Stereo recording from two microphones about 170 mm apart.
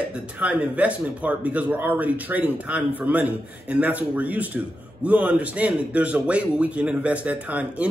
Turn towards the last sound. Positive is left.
turn(degrees=-10)  # may be behind; listen again after turning